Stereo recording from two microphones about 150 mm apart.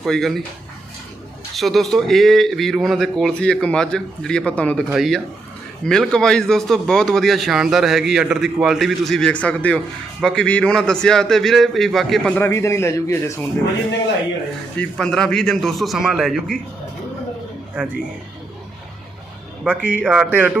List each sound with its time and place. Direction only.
0.0 s speech: centre (ahead or behind)
1.5 s speech: centre (ahead or behind)
12.4 s a man's voice: 20° left (ahead or behind)
14.8 s speech: 5° left (ahead or behind)
19.6 s speech: 10° right (ahead or behind)